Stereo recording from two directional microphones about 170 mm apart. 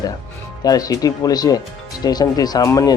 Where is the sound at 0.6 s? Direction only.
20° left (ahead or behind).